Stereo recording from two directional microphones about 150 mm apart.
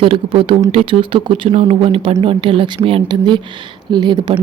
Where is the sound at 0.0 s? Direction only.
35° right (ahead or behind).